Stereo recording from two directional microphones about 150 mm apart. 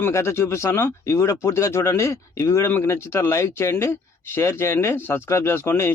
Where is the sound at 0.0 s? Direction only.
20° left (ahead or behind).